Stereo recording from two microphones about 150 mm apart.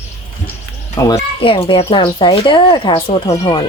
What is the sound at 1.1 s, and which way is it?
Speech, 40° left (ahead or behind).